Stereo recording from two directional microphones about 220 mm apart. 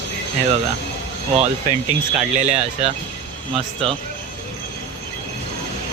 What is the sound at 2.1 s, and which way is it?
Speech, 30° right (ahead or behind).